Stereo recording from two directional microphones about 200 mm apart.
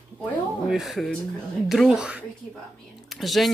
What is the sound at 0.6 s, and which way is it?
A woman's voice, centre (ahead or behind).